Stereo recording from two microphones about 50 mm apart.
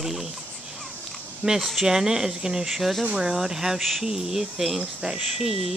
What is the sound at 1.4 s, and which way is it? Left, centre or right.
Speech, centre.